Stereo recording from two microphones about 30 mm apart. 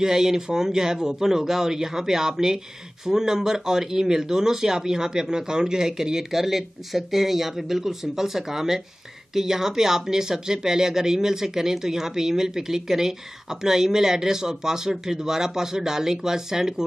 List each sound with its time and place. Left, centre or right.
0.0 s speech: centre